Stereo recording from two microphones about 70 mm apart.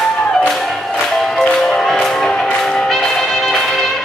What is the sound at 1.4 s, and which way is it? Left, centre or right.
Music, centre.